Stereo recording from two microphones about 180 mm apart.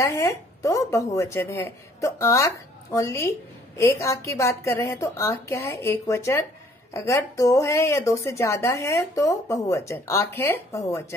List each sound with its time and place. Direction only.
0.0 s speech: 15° left (ahead or behind)